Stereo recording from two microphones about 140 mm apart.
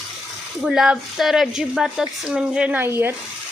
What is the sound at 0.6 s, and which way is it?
Speech, 5° right (ahead or behind).